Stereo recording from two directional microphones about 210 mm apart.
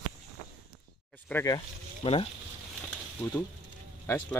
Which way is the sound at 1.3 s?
15° left (ahead or behind).